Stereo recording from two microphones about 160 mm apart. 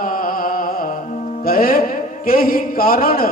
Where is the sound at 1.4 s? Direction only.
65° left (ahead or behind).